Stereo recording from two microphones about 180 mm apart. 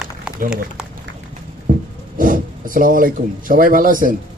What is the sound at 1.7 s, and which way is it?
Snort, 50° right (ahead or behind).